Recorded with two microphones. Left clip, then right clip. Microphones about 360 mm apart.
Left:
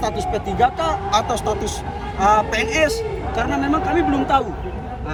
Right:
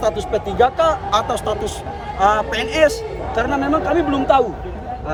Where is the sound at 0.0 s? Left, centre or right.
Centre.